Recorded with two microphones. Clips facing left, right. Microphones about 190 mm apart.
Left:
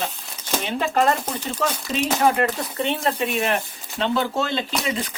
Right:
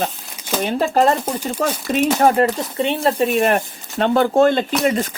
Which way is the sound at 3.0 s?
30° right (ahead or behind).